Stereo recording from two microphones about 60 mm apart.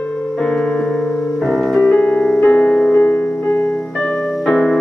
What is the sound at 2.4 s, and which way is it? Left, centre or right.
Music, centre.